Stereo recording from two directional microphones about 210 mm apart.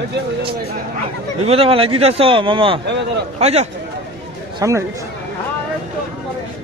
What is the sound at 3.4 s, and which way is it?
Speech, 30° right (ahead or behind).